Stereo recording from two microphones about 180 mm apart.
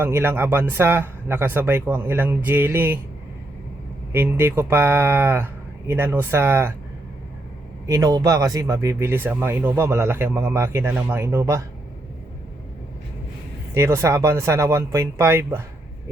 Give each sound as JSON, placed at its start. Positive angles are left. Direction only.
{"t": 0.0, "sound": "speech", "side_deg": -10}
{"t": 4.1, "sound": "speech", "side_deg": -10}
{"t": 7.9, "sound": "speech", "side_deg": -20}
{"t": 13.7, "sound": "speech", "side_deg": -15}